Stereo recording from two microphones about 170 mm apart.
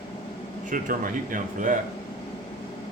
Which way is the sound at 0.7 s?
55° right (ahead or behind).